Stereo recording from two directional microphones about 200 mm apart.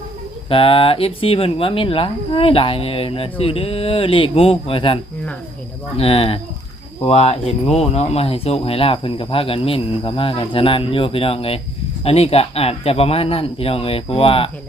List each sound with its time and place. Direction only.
0.5 s speech: 25° left (ahead or behind)
6.0 s speech: 30° left (ahead or behind)